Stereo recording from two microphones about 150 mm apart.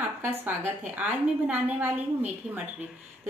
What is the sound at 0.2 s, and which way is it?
A woman's voice, 15° right (ahead or behind).